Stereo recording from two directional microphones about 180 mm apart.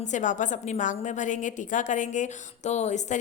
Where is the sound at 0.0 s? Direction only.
45° left (ahead or behind).